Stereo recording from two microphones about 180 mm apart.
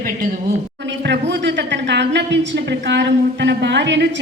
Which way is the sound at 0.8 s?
75° right (ahead or behind).